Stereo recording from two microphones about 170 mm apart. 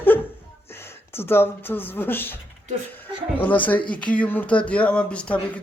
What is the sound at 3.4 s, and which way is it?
Speech, 10° left (ahead or behind).